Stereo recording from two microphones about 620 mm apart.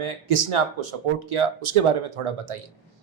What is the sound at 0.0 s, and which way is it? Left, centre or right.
Speech, right.